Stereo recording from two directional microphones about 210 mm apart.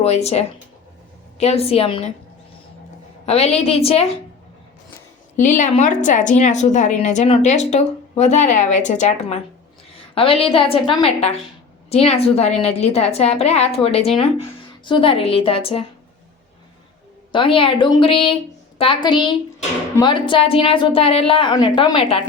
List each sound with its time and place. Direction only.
0.0 s a woman's voice: 30° left (ahead or behind)
3.2 s a woman's voice: 30° left (ahead or behind)
5.4 s a woman's voice: 35° left (ahead or behind)
17.3 s a woman's voice: 25° left (ahead or behind)